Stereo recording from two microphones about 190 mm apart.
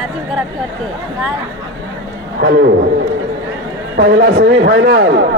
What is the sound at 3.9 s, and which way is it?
A man's voice, 60° right (ahead or behind).